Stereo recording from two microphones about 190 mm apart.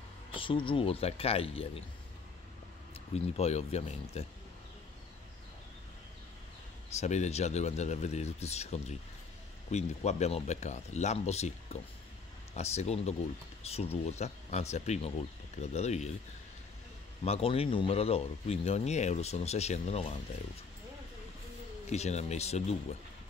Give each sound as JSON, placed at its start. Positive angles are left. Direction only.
{"t": 0.3, "sound": "speech", "side_deg": 25}
{"t": 2.9, "sound": "speech", "side_deg": 35}
{"t": 7.0, "sound": "speech", "side_deg": 35}
{"t": 17.2, "sound": "speech", "side_deg": 30}
{"t": 21.9, "sound": "speech", "side_deg": 35}